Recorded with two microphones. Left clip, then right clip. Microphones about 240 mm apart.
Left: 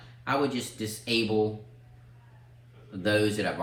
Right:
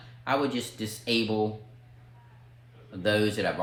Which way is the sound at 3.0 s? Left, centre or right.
Right.